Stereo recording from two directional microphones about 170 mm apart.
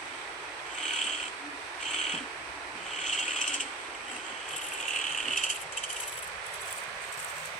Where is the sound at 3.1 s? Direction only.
45° left (ahead or behind).